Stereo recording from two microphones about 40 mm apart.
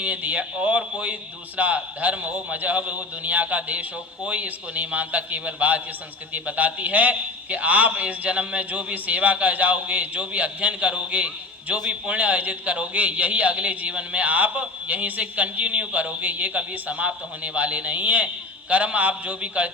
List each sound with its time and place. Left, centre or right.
0.0 s a man's voice: right